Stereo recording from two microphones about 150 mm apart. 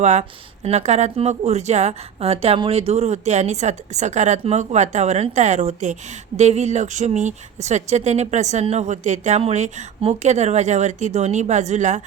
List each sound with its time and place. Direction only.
0.0 s speech: 50° right (ahead or behind)